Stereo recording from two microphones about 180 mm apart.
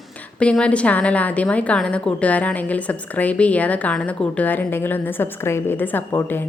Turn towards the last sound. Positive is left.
turn(degrees=10)  # may be behind; listen again after turning